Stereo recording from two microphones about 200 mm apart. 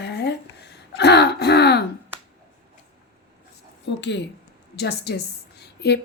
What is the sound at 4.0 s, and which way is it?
A woman's voice, 60° left (ahead or behind).